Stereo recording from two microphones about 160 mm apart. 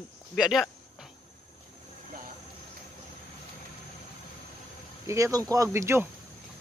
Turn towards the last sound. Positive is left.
turn(degrees=-15)  # may be behind; listen again after turning